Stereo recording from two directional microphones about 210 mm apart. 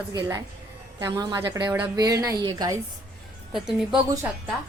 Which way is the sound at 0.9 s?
20° right (ahead or behind).